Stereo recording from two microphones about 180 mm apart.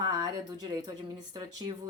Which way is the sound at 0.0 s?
20° right (ahead or behind).